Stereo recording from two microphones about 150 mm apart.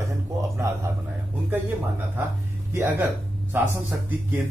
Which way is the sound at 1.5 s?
15° right (ahead or behind).